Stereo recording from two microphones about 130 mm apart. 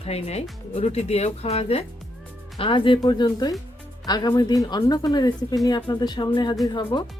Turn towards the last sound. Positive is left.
turn(degrees=35)  # may be behind; listen again after turning